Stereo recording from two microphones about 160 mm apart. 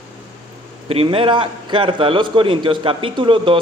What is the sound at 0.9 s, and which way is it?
A man's voice, 35° right (ahead or behind).